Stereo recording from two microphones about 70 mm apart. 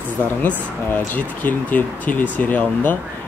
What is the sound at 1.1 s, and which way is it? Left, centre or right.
Speech, left.